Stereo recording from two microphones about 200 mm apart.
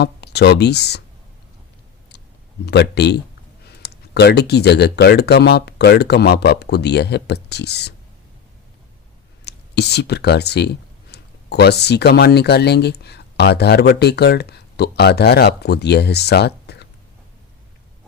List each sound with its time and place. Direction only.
0.0 s speech: 55° left (ahead or behind)
2.6 s speech: 55° left (ahead or behind)
9.4 s speech: 55° left (ahead or behind)